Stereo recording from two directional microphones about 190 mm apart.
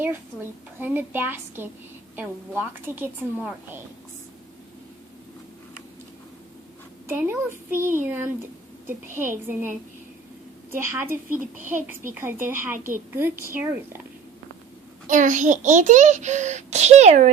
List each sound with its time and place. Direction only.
0.8 s a woman's voice: 10° right (ahead or behind)
7.1 s a woman's voice: 10° right (ahead or behind)
15.0 s a child's voice: 40° right (ahead or behind)